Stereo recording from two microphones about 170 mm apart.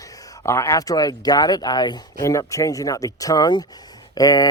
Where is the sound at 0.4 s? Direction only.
15° left (ahead or behind).